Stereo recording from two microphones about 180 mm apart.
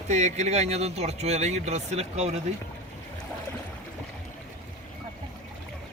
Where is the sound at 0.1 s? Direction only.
40° right (ahead or behind).